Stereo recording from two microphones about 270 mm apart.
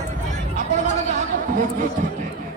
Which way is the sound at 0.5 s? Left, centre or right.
Right.